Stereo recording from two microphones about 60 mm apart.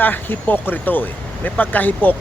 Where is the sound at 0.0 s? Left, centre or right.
Left.